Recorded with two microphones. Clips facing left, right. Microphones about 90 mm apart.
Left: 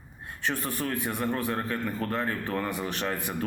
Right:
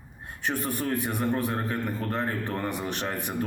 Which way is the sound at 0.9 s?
20° right (ahead or behind).